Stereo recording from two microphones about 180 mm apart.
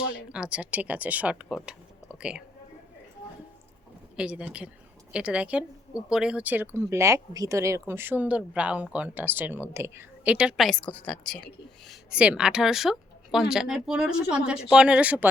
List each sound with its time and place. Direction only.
0.1 s a woman's voice: 5° right (ahead or behind)
4.2 s speech: 5° right (ahead or behind)
11.9 s speech: 5° right (ahead or behind)